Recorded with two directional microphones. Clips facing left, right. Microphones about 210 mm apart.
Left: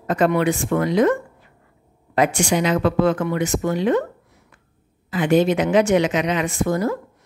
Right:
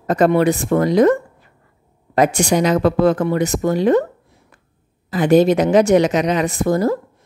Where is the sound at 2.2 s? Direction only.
40° right (ahead or behind).